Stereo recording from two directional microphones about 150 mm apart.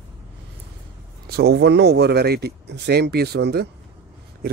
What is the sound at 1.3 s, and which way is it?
Speech, 90° right.